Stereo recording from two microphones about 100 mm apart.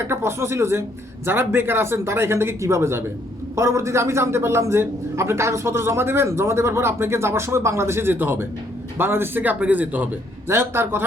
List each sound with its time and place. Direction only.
0.1 s a man's voice: 25° right (ahead or behind)